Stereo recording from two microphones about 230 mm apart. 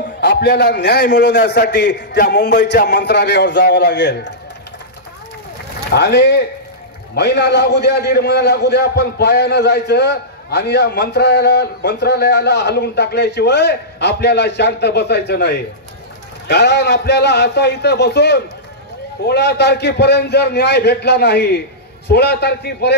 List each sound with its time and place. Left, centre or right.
0.2 s a man's voice: left
5.9 s a man's voice: left